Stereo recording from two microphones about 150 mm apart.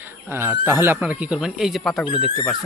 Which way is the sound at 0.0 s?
15° right (ahead or behind).